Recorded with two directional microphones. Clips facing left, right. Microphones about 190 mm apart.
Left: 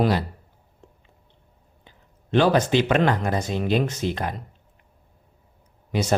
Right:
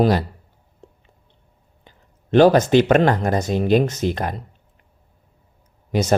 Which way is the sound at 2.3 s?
45° right (ahead or behind).